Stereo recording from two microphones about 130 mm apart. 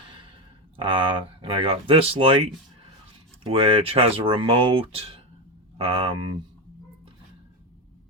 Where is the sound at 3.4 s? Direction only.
45° right (ahead or behind).